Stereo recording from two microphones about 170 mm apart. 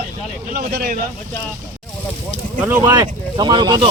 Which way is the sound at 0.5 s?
55° right (ahead or behind).